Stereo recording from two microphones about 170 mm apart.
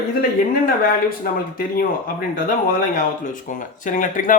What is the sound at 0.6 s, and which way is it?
Speech, 60° left (ahead or behind).